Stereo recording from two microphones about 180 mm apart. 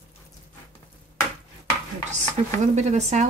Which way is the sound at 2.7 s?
40° right (ahead or behind).